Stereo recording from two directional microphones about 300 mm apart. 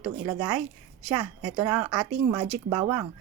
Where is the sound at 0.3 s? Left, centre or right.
Centre.